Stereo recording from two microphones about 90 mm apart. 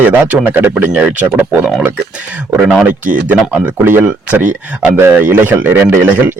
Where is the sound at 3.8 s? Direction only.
25° right (ahead or behind).